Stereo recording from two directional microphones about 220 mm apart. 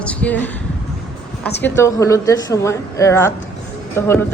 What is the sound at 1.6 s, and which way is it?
A woman's voice, 10° left (ahead or behind).